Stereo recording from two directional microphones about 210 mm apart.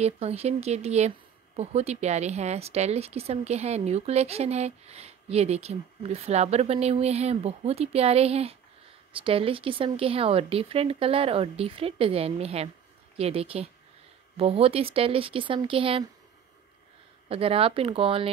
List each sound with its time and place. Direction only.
0.0 s a woman's voice: 30° right (ahead or behind)
17.3 s speech: 25° right (ahead or behind)